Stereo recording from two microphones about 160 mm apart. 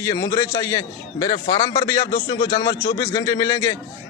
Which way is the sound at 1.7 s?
20° left (ahead or behind).